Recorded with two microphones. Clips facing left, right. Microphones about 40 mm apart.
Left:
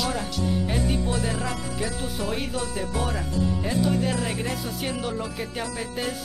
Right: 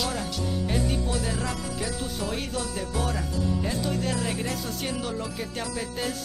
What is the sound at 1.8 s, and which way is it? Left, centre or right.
Music, centre.